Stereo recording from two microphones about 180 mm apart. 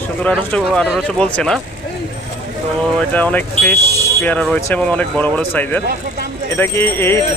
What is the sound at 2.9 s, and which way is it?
Speech, 10° left (ahead or behind).